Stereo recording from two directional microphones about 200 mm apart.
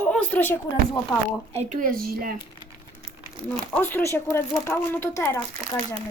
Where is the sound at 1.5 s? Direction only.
40° right (ahead or behind).